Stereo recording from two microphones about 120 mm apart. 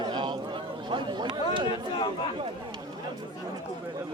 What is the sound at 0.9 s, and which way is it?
Chatter, 40° right (ahead or behind).